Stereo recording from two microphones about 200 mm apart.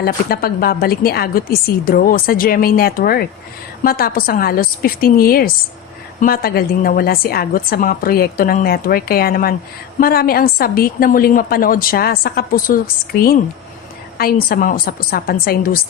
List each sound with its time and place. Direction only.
0.0 s a woman's voice: 50° left (ahead or behind)